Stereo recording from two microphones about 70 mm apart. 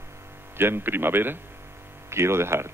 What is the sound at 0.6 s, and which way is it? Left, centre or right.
Speech, right.